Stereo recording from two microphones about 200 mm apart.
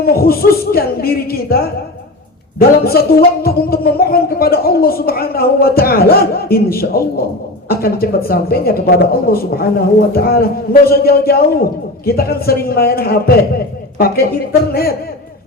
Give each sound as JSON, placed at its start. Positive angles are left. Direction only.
{"t": 0.0, "sound": "speech", "side_deg": 50}
{"t": 14.7, "sound": "speech", "side_deg": 50}